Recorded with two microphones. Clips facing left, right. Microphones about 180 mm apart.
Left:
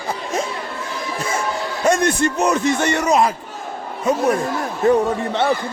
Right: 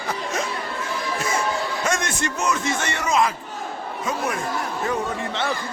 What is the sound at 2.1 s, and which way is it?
Speech, 35° left (ahead or behind).